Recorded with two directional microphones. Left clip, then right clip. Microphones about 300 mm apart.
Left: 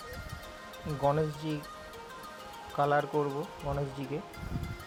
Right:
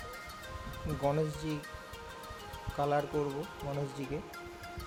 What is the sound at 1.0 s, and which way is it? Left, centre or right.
Speech, centre.